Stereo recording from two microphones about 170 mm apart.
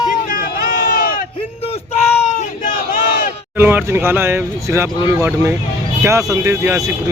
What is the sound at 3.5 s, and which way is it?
Speech, 10° right (ahead or behind).